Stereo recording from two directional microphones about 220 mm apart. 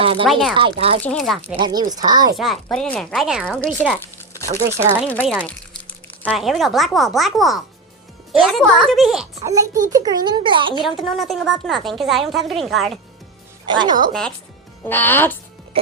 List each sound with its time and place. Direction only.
0.0 s speech: 25° right (ahead or behind)
0.3 s a woman's voice: centre (ahead or behind)
0.5 s speech: 25° right (ahead or behind)
1.0 s a woman's voice: centre (ahead or behind)
1.5 s speech: 20° right (ahead or behind)
2.3 s a woman's voice: centre (ahead or behind)
9.4 s speech: 15° right (ahead or behind)
10.8 s a woman's voice: centre (ahead or behind)
13.7 s a woman's voice: 20° right (ahead or behind)
14.1 s a woman's voice: 5° left (ahead or behind)
15.7 s music: 25° right (ahead or behind)